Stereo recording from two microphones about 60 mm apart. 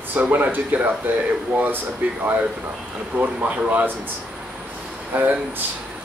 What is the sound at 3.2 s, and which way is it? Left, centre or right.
Speech, right.